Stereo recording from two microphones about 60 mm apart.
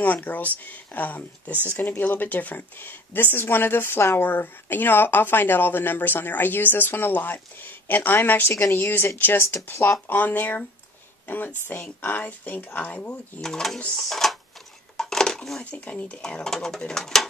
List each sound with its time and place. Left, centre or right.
0.0 s speech: left
8.5 s speech: left
10.0 s speech: left
13.4 s speech: centre
15.0 s dishes: centre
15.6 s speech: left
16.2 s speech: centre